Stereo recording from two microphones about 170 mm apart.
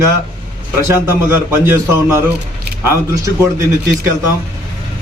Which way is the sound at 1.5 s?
15° right (ahead or behind).